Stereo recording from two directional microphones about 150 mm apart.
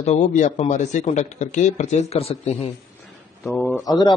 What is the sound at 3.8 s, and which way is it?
Speech, 25° left (ahead or behind).